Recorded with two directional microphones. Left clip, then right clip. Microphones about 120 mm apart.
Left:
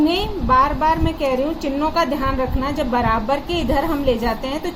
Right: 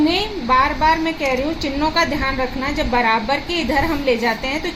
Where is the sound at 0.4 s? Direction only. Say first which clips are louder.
Left 1 dB; 20° right (ahead or behind).